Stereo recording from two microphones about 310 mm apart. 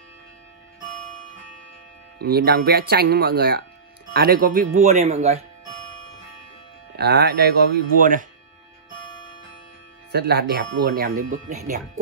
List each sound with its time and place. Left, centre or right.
2.1 s speech: right
7.0 s speech: right
10.1 s speech: right